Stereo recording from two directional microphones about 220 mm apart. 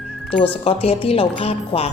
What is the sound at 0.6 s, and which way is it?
A woman's voice, 25° left (ahead or behind).